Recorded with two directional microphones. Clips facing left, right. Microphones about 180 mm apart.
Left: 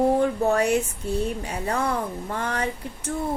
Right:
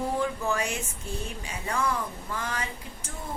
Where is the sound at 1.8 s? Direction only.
60° left (ahead or behind).